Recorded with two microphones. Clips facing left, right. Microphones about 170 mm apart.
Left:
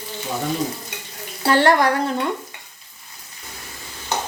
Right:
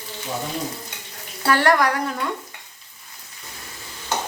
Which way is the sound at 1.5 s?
25° left (ahead or behind).